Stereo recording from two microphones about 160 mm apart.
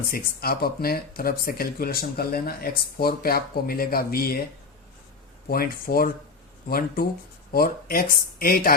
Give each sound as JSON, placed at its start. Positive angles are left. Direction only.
{"t": 0.1, "sound": "speech", "side_deg": 70}
{"t": 5.5, "sound": "speech", "side_deg": 65}